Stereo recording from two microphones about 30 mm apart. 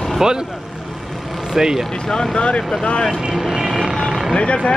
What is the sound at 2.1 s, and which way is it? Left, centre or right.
Speech, left.